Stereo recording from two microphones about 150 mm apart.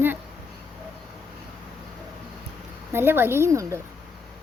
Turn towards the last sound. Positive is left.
turn(degrees=-20)  # may be behind; listen again after turning